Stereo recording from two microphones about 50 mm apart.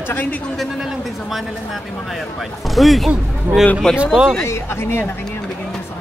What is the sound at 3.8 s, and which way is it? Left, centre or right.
Speech, centre.